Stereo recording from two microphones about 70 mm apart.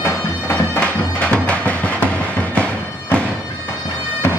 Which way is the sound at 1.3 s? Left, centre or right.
Centre.